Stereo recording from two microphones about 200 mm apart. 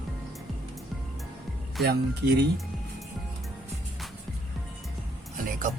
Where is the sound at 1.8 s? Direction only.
55° right (ahead or behind).